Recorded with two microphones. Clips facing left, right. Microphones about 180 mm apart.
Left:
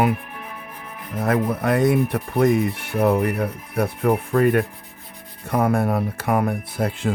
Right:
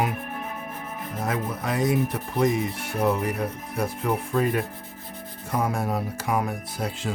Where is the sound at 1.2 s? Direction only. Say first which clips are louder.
Left 8 dB; 60° left (ahead or behind).